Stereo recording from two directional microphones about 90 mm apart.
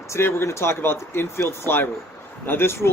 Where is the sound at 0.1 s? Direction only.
30° left (ahead or behind).